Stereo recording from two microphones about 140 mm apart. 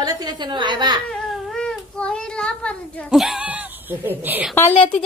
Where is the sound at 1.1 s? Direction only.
Centre (ahead or behind).